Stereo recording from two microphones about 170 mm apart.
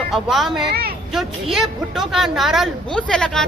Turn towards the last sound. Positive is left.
turn(degrees=5)  # may be behind; listen again after turning